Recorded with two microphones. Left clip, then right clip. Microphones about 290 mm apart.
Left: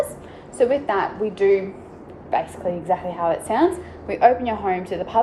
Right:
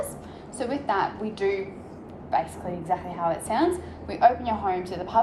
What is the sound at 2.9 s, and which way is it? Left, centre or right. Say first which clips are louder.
A woman's voice: left 4 dB; centre.